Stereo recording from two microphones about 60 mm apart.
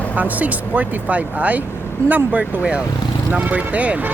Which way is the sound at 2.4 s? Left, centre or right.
Centre.